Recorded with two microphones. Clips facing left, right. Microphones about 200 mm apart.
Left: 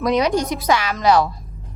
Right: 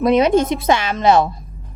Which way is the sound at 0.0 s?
25° right (ahead or behind).